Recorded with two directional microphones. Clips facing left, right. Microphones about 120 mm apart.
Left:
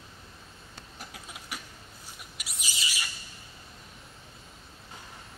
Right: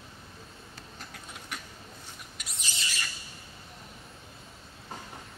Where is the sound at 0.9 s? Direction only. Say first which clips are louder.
Left 1 dB; 10° left (ahead or behind).